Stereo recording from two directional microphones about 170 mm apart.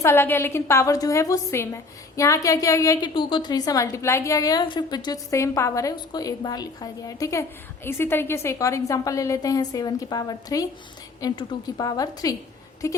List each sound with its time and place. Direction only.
0.0 s a woman's voice: 15° left (ahead or behind)